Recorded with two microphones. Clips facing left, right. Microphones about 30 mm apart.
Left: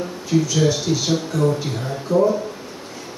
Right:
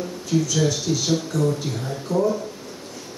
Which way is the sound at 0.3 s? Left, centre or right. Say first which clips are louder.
Left 3 dB; centre.